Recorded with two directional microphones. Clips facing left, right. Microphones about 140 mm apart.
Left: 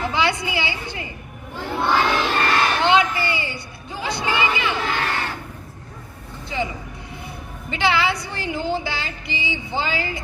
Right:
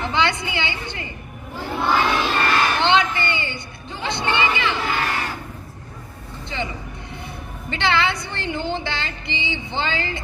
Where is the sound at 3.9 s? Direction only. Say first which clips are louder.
Even; 25° right (ahead or behind).